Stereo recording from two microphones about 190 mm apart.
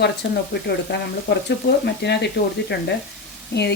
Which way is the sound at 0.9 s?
60° left (ahead or behind).